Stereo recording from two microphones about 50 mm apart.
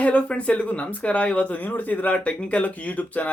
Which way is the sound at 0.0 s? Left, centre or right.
Left.